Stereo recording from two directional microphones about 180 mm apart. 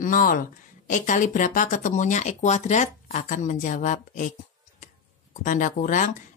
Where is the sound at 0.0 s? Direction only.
50° left (ahead or behind).